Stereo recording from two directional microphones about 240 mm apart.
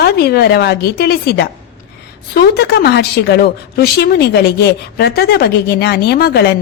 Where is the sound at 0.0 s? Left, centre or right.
Left.